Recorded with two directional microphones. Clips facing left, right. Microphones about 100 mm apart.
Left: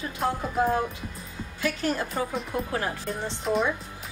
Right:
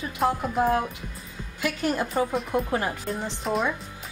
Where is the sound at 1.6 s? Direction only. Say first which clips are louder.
Right 1 dB; 20° right (ahead or behind).